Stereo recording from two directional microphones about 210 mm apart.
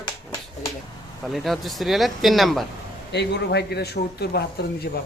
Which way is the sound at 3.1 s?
55° left (ahead or behind).